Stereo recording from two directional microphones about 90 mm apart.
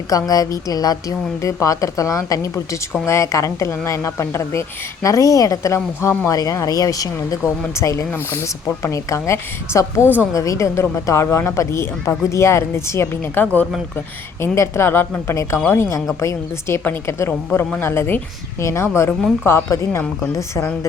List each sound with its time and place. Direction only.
0.1 s a woman's voice: 40° left (ahead or behind)
13.4 s speech: 15° left (ahead or behind)
14.4 s a woman's voice: 30° left (ahead or behind)